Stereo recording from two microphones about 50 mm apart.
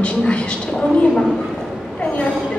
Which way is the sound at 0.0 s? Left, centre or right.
Left.